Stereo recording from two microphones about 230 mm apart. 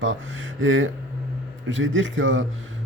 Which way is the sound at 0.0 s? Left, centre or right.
Right.